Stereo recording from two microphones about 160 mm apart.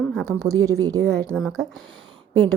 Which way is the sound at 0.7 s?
20° right (ahead or behind).